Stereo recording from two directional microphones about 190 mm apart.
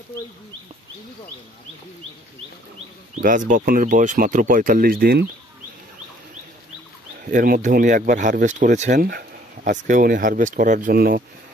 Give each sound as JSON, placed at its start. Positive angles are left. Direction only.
{"t": 3.2, "sound": "speech", "side_deg": -45}
{"t": 7.2, "sound": "speech", "side_deg": -45}